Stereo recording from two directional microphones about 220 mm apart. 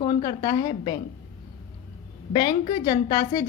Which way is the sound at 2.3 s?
20° left (ahead or behind).